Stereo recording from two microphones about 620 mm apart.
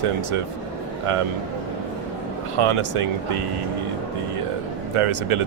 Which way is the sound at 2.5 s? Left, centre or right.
Right.